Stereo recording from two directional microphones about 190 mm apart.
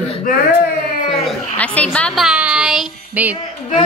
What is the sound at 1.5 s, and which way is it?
A woman's voice, 10° left (ahead or behind).